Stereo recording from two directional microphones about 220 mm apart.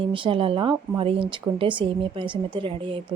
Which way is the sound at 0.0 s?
25° right (ahead or behind).